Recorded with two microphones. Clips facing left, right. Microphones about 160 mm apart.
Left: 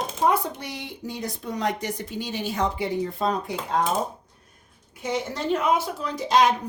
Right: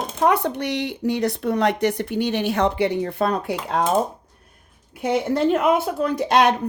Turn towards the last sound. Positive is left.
turn(degrees=-65)  # may be behind; listen again after turning